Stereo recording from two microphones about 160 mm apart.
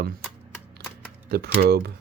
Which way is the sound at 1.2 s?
85° right.